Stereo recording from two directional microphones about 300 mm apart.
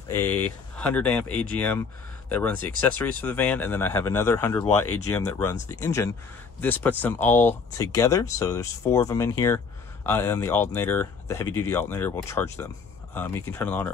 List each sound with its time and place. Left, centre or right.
0.1 s speech: centre